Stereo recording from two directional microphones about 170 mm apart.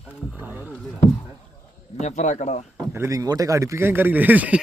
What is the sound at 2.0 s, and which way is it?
Speech, 45° left (ahead or behind).